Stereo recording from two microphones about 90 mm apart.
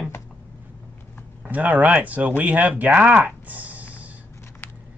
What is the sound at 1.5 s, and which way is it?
Speech, 20° right (ahead or behind).